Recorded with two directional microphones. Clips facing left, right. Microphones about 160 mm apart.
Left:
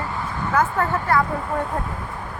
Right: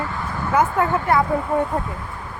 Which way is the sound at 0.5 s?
15° right (ahead or behind).